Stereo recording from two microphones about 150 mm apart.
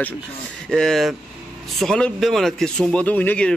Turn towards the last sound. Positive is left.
turn(degrees=10)  # may be behind; listen again after turning